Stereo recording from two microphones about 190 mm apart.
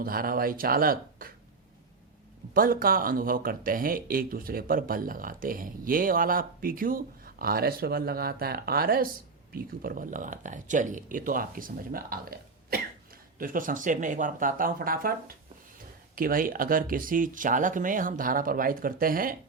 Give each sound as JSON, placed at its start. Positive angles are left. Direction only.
{"t": 0.0, "sound": "speech", "side_deg": -50}
{"t": 2.5, "sound": "speech", "side_deg": -50}
{"t": 16.1, "sound": "speech", "side_deg": -50}